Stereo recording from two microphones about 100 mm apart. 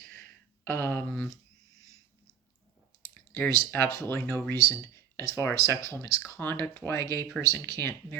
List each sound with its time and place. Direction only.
0.6 s speech: 20° left (ahead or behind)
3.3 s speech: 15° left (ahead or behind)